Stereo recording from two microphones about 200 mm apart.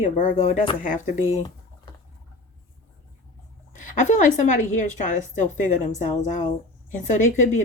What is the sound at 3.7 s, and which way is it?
Speech, 40° left (ahead or behind).